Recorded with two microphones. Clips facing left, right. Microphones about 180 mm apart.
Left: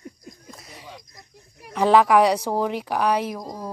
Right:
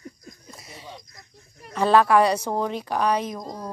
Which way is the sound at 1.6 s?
15° left (ahead or behind).